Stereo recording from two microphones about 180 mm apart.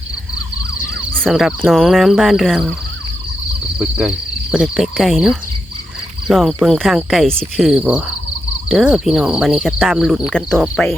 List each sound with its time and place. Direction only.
1.1 s cricket: centre (ahead or behind)
3.8 s cricket: 5° right (ahead or behind)